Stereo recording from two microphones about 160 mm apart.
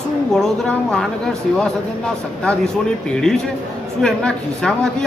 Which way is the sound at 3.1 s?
5° left (ahead or behind).